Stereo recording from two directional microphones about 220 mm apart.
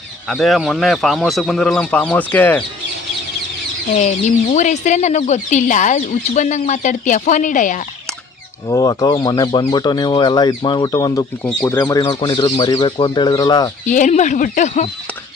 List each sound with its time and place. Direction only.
0.3 s speech: centre (ahead or behind)
3.9 s speech: 30° left (ahead or behind)
8.6 s speech: 15° left (ahead or behind)
13.8 s speech: 35° left (ahead or behind)